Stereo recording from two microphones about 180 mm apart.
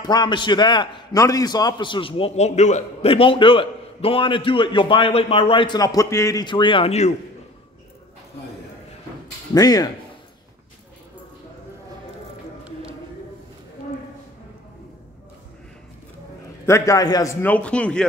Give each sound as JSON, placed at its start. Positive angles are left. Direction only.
{"t": 0.0, "sound": "a man's voice", "side_deg": 25}
{"t": 9.5, "sound": "a man's voice", "side_deg": 20}
{"t": 16.6, "sound": "a man's voice", "side_deg": 15}